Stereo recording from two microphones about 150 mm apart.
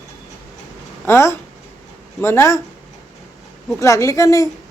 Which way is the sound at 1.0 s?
15° left (ahead or behind).